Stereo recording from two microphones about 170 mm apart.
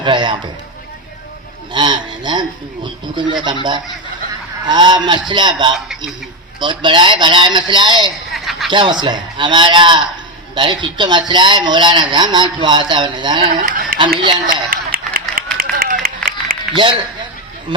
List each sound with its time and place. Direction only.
0.0 s speech: 25° right (ahead or behind)
1.7 s speech: 25° right (ahead or behind)
8.3 s chuckle: centre (ahead or behind)
8.7 s speech: 25° right (ahead or behind)
13.5 s a sound: 55° right (ahead or behind)
14.5 s run: 55° right (ahead or behind)